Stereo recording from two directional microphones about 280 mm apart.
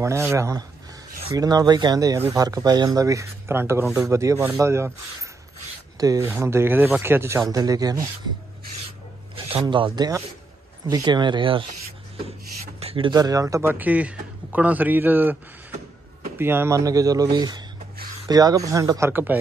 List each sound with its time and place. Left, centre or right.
0.0 s speech: centre
5.9 s speech: centre
9.3 s speech: centre
12.8 s speech: centre
16.3 s speech: centre